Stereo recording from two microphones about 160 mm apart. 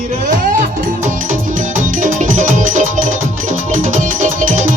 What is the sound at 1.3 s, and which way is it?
Music, 55° right (ahead or behind).